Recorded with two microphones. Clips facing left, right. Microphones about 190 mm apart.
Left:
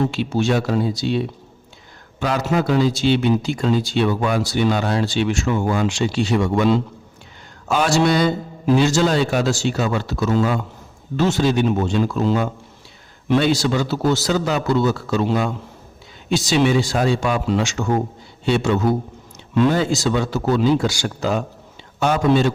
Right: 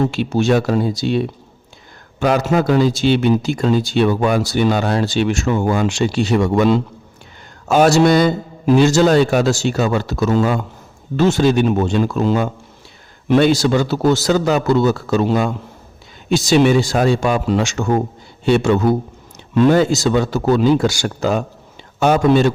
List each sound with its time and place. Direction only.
0.1 s a man's voice: 50° right (ahead or behind)